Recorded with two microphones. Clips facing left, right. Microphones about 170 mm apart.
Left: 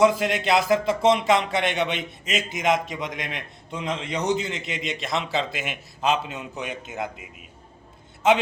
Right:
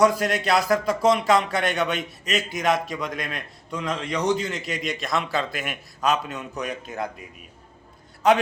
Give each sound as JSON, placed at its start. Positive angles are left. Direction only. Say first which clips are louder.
{"t": 0.0, "sound": "a man's voice", "louder": "even", "side_deg": 20}